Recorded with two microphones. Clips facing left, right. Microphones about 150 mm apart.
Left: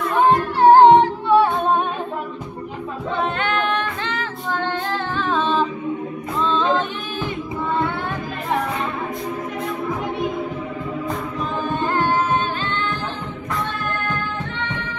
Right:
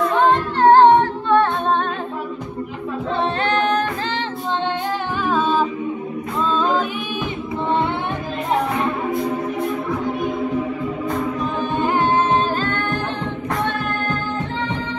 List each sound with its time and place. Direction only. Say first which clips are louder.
0.2 s singing: left 2 dB; 10° left (ahead or behind)
3.4 s music: right 3 dB; 35° right (ahead or behind)
5.2 s a capella: right 2 dB; 10° right (ahead or behind)
11.8 s music: right 2 dB; 20° right (ahead or behind)
12.6 s music: right 3 dB; 50° right (ahead or behind)